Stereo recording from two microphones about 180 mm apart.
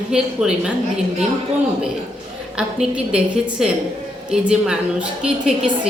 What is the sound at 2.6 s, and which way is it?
A woman's voice, 5° right (ahead or behind).